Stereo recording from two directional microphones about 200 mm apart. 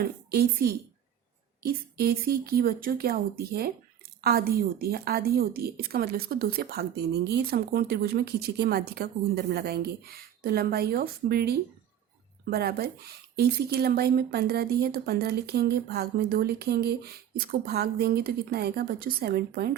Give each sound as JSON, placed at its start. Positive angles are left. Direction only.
{"t": 0.3, "sound": "a woman's voice", "side_deg": -50}